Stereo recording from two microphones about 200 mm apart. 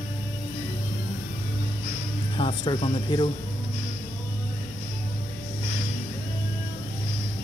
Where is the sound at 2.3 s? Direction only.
25° left (ahead or behind).